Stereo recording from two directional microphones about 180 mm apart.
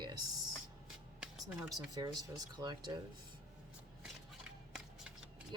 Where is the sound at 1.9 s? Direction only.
20° right (ahead or behind).